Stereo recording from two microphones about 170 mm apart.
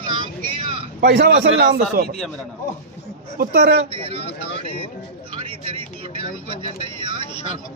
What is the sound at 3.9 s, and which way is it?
Speech, 35° right (ahead or behind).